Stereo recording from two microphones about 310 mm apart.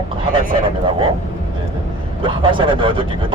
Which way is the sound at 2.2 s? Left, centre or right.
Centre.